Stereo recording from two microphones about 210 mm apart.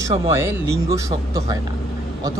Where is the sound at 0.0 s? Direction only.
15° right (ahead or behind).